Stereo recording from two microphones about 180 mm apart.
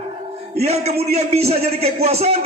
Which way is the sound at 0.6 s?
35° right (ahead or behind).